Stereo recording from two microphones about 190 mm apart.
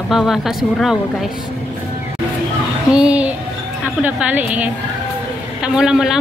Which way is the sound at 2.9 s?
5° right (ahead or behind).